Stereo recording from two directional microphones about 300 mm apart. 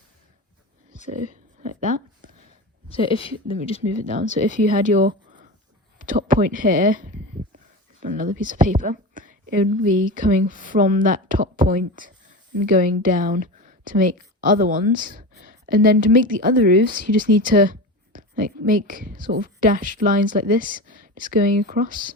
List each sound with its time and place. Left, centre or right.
1.1 s speech: right
2.9 s speech: centre
4.0 s a woman's voice: right
6.1 s a woman's voice: right